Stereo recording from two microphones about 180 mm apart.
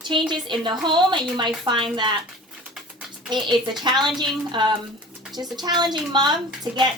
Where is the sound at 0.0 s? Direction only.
25° right (ahead or behind).